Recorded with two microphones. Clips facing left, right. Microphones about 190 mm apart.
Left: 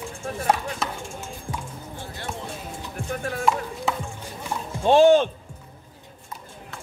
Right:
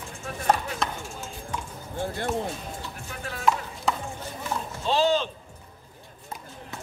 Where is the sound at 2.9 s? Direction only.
50° left (ahead or behind).